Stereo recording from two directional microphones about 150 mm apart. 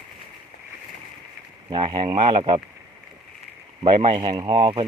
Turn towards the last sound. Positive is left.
turn(degrees=-30)  # may be behind; listen again after turning